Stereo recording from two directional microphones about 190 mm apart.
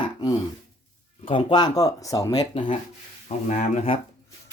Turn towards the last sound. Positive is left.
turn(degrees=35)  # may be behind; listen again after turning